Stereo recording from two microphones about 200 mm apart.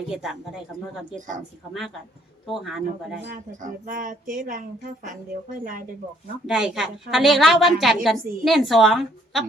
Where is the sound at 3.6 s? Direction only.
40° right (ahead or behind).